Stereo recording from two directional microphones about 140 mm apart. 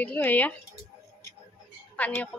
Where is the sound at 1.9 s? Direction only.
10° left (ahead or behind).